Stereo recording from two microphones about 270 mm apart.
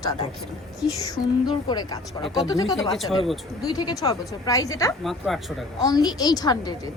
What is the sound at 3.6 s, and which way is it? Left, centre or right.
A woman's voice, centre.